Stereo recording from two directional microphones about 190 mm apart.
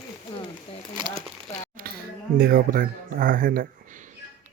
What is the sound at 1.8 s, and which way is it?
Speech, 50° right (ahead or behind).